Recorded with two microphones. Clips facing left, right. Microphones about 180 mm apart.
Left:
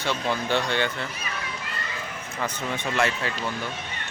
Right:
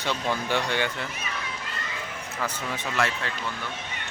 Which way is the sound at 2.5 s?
5° right (ahead or behind).